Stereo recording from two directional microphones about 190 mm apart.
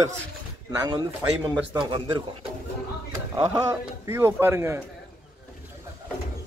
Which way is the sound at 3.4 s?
25° right (ahead or behind).